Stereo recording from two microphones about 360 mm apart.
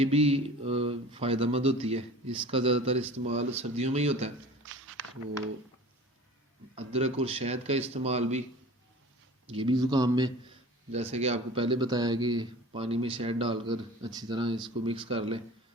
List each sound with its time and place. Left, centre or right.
0.0 s speech: centre
6.7 s speech: centre
9.5 s speech: centre